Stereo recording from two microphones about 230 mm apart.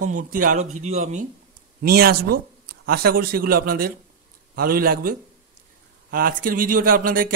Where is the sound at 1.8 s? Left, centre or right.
Right.